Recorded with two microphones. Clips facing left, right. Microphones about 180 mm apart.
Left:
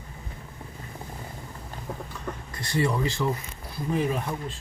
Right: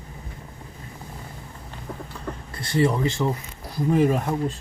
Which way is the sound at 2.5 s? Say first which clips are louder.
Right 5 dB; 25° right (ahead or behind).